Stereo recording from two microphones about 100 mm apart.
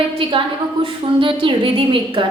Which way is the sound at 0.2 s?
60° right (ahead or behind).